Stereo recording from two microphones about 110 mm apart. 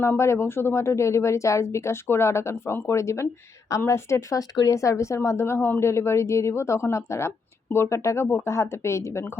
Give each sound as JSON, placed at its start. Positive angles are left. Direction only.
{"t": 0.0, "sound": "a woman's voice", "side_deg": 25}